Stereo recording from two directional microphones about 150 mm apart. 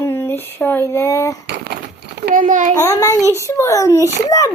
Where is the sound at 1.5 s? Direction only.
90° right; by 2.7 s 60° right (ahead or behind).